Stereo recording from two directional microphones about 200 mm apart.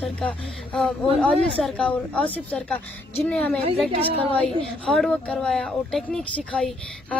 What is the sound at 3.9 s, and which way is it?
Speech, 30° right (ahead or behind).